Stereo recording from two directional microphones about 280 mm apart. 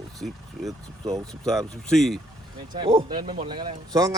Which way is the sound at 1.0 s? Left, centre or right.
Centre.